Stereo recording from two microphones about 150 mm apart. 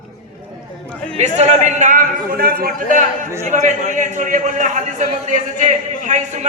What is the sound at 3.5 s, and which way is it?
A man's voice, 50° right (ahead or behind).